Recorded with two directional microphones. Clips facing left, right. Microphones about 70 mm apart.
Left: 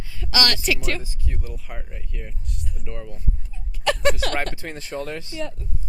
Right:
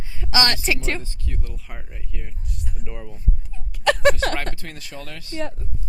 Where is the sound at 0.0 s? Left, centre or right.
Right.